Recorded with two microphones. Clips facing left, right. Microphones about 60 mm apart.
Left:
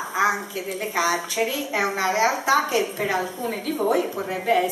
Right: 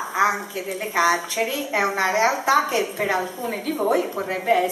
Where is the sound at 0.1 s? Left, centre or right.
Centre.